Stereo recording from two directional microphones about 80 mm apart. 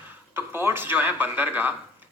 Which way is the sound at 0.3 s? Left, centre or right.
Right.